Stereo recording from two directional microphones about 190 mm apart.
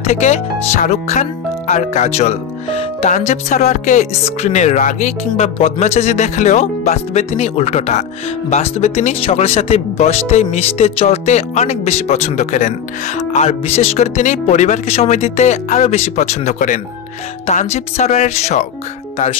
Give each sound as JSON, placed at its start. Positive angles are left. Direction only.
{"t": 0.0, "sound": "speech", "side_deg": 35}